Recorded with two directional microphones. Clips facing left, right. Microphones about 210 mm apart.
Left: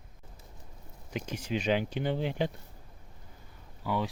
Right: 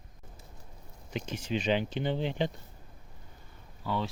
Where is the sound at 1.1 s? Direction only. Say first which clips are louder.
Even; 10° left (ahead or behind).